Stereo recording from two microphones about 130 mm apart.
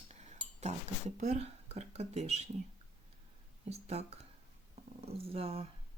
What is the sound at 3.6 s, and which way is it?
Speech, 55° right (ahead or behind).